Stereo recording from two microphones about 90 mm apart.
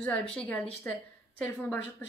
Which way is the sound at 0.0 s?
10° left (ahead or behind).